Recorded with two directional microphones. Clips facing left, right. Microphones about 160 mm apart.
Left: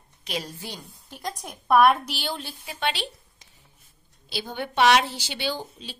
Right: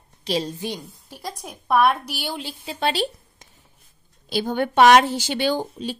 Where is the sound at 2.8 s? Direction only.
40° right (ahead or behind).